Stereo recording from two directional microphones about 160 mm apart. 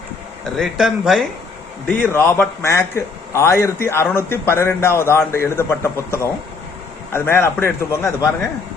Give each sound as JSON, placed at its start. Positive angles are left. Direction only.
{"t": 0.6, "sound": "speech", "side_deg": 0}
{"t": 2.0, "sound": "a man's voice", "side_deg": 15}